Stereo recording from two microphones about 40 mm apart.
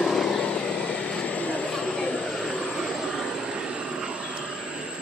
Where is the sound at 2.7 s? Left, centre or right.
Centre; by 4.4 s right.